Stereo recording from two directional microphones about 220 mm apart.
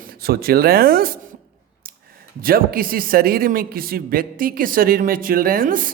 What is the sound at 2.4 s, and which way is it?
Speech, 40° right (ahead or behind).